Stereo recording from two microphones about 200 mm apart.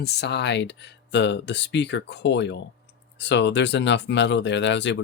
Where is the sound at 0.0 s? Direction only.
55° left (ahead or behind).